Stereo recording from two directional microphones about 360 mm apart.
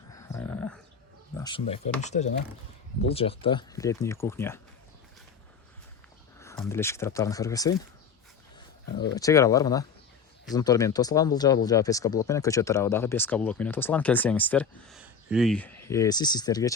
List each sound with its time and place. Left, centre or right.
0.1 s a sound: centre
1.4 s speech: centre
6.4 s speech: centre
9.1 s speech: centre